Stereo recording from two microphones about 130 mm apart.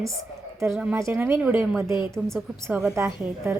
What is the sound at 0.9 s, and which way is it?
A woman's voice, 20° right (ahead or behind).